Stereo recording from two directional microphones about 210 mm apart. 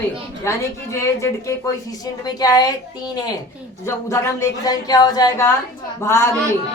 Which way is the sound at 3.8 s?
15° left (ahead or behind).